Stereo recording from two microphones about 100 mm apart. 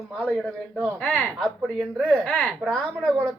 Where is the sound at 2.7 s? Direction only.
5° left (ahead or behind).